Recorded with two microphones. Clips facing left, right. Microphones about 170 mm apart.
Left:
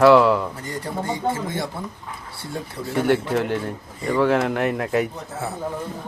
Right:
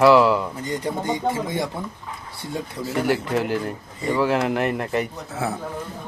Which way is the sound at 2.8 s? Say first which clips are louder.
Left 3 dB; centre (ahead or behind).